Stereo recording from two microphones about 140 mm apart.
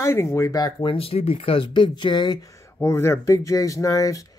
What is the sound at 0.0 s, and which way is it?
Speech, 20° left (ahead or behind).